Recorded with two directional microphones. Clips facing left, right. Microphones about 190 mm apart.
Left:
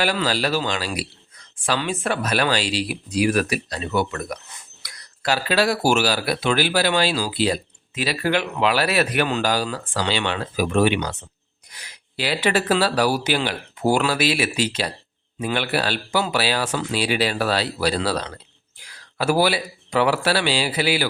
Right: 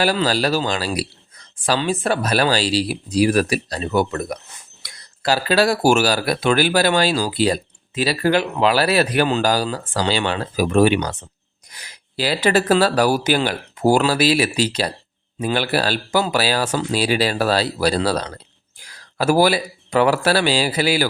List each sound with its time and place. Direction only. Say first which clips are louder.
0.0 s a man's voice: right 3 dB; 35° right (ahead or behind)